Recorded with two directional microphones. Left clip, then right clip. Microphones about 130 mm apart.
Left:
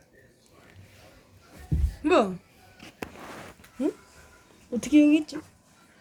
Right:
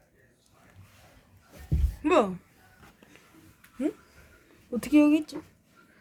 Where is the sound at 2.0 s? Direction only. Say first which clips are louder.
Left 1 dB; 20° right (ahead or behind).